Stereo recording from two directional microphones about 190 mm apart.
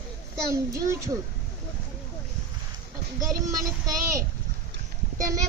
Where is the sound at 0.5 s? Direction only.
15° right (ahead or behind).